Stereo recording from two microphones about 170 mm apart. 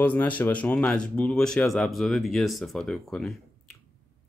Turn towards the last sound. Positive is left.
turn(degrees=5)  # may be behind; listen again after turning